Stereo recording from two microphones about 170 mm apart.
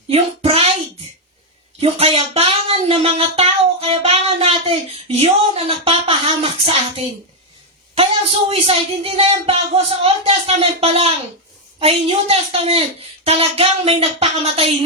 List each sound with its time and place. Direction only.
0.1 s a sound: 35° right (ahead or behind)
1.8 s child singing: 35° right (ahead or behind)
8.4 s a woman's voice: 35° right (ahead or behind)